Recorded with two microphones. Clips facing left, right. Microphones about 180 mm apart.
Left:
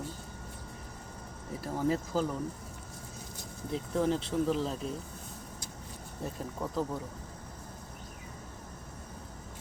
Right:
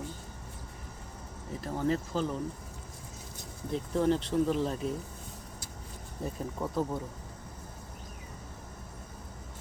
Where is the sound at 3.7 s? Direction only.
Centre (ahead or behind).